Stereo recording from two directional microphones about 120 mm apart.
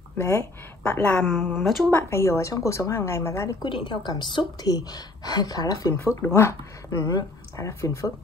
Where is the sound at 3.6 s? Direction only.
40° left (ahead or behind); by 8.1 s 25° left (ahead or behind).